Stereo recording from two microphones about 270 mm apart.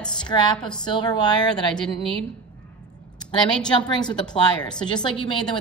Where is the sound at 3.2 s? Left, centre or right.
Centre.